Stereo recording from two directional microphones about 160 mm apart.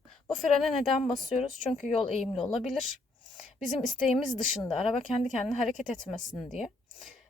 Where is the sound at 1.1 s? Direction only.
40° left (ahead or behind).